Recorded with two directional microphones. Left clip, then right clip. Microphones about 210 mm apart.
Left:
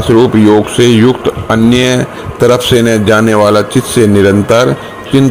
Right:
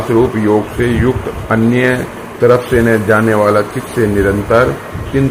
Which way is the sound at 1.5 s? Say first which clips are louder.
Left 2 dB; 50° left (ahead or behind).